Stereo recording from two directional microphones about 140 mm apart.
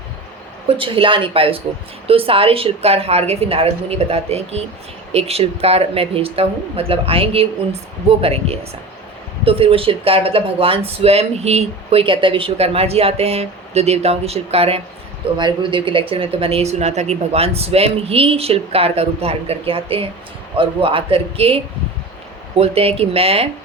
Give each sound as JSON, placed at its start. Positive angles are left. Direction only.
{"t": 0.8, "sound": "speech", "side_deg": -40}
{"t": 15.4, "sound": "speech", "side_deg": -35}